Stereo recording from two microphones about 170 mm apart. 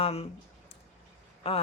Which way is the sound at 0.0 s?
35° left (ahead or behind).